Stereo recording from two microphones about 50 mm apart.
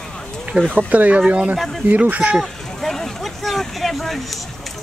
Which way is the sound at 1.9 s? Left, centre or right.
Right.